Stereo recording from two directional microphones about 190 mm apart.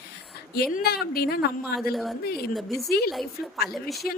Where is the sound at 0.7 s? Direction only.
55° left (ahead or behind).